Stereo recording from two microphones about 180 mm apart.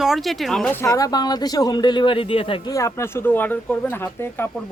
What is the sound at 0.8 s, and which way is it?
Speech, 20° left (ahead or behind).